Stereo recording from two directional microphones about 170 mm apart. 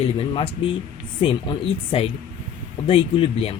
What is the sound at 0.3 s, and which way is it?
Speech, 30° left (ahead or behind).